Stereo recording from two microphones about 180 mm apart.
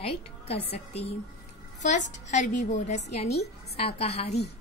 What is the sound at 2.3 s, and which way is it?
A woman's voice, 40° left (ahead or behind).